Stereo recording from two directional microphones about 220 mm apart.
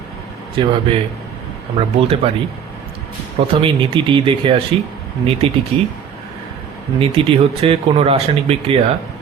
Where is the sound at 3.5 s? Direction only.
25° right (ahead or behind).